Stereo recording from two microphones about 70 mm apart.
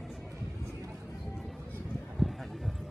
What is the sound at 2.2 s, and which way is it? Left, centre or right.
Horse, centre.